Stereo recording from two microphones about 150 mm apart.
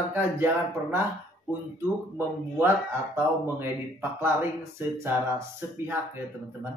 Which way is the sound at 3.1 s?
15° right (ahead or behind).